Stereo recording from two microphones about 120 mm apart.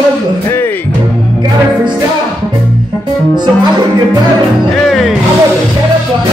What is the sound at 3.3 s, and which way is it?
Music, 40° right (ahead or behind).